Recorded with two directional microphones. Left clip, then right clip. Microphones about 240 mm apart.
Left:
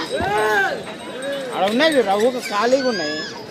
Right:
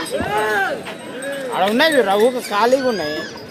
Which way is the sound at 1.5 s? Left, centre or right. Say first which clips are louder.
Right 2 dB; right.